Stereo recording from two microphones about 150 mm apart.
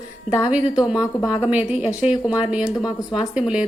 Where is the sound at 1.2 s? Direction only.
25° left (ahead or behind).